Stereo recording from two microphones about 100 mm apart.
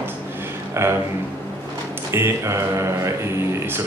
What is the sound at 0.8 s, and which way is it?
Speech, 25° right (ahead or behind).